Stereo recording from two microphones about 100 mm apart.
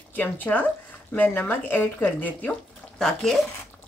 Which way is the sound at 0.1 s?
15° left (ahead or behind).